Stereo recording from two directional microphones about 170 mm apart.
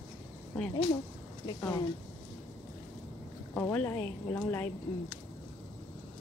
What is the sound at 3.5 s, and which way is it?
A woman's voice, 10° left (ahead or behind).